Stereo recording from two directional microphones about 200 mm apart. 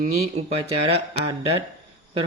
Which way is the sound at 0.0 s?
35° right (ahead or behind).